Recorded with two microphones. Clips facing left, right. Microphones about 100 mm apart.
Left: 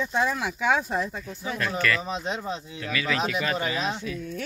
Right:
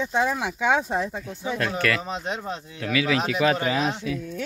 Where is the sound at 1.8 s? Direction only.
70° right (ahead or behind).